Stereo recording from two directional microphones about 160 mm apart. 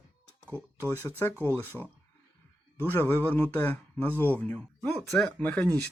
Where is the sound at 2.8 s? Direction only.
10° left (ahead or behind).